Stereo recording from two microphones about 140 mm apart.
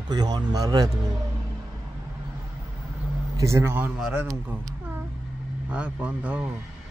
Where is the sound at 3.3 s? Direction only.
20° right (ahead or behind).